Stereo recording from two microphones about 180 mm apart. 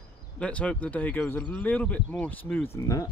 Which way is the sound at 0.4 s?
5° left (ahead or behind).